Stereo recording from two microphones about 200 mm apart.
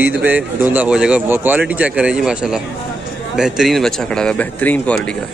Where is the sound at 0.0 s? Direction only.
10° right (ahead or behind).